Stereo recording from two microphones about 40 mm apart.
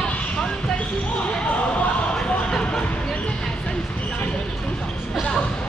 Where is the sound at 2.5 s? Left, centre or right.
Centre.